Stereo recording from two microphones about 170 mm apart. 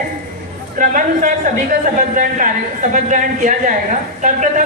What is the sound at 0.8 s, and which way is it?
Speech, 50° right (ahead or behind).